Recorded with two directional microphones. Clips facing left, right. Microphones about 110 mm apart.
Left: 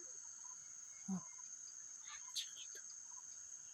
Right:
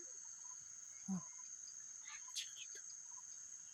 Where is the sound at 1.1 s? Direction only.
10° left (ahead or behind).